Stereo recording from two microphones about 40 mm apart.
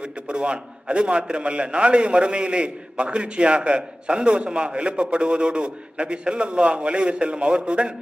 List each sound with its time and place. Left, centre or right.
0.0 s a man's voice: right